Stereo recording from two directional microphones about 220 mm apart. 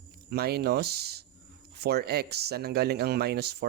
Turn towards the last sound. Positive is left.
turn(degrees=-50)  # may be behind; listen again after turning